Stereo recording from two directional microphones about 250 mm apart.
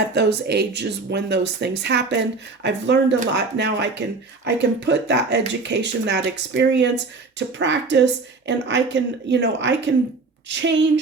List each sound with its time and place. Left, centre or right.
0.1 s a woman's voice: right